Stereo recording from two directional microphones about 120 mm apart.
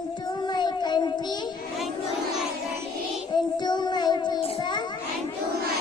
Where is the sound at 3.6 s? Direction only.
35° left (ahead or behind).